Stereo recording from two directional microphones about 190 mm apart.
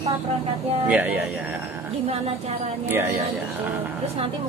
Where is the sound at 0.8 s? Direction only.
5° right (ahead or behind).